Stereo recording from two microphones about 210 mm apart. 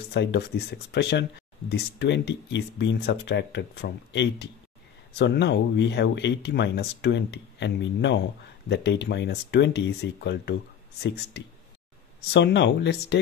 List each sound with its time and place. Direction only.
0.1 s speech: 55° left (ahead or behind)